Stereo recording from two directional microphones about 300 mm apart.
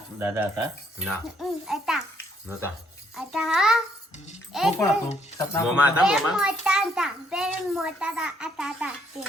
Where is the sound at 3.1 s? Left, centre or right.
Centre.